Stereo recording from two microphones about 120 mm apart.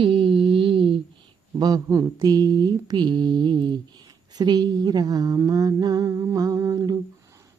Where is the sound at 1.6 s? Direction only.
35° right (ahead or behind).